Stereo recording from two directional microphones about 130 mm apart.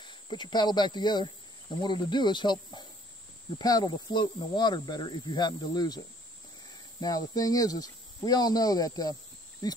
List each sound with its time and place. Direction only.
0.0 s speech: 35° left (ahead or behind)